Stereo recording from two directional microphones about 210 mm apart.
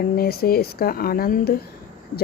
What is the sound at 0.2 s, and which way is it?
Speech, 45° left (ahead or behind).